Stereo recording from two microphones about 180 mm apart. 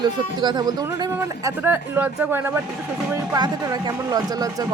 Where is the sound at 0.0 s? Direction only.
25° right (ahead or behind).